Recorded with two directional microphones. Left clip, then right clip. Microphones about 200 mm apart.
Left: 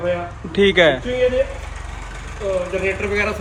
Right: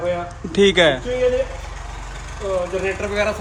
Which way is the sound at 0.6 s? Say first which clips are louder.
Left 1 dB; 20° right (ahead or behind).